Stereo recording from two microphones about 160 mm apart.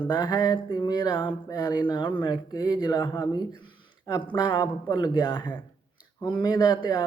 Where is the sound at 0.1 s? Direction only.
25° left (ahead or behind).